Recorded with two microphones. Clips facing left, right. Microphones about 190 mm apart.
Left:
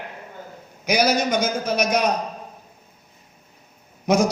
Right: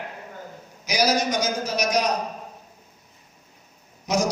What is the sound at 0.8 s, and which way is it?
A man's voice, 55° left (ahead or behind).